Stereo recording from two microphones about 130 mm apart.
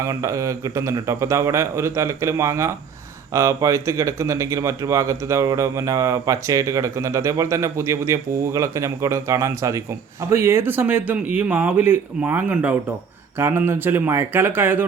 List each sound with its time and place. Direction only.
0.0 s a man's voice: 25° right (ahead or behind)